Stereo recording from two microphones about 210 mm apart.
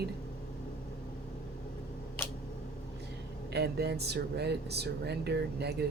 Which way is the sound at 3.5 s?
50° right (ahead or behind).